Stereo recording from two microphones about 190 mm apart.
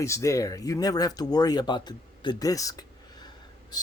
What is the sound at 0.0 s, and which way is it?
A man's voice, 15° left (ahead or behind).